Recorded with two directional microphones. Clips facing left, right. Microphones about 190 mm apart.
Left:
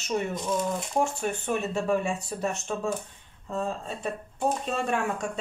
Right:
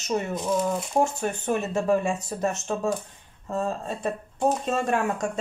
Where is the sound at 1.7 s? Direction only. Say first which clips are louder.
Right 5 dB; 45° right (ahead or behind).